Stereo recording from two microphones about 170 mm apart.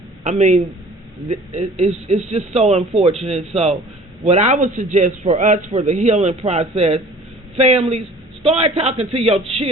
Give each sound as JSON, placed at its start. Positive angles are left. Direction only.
{"t": 0.3, "sound": "a man's voice", "side_deg": -45}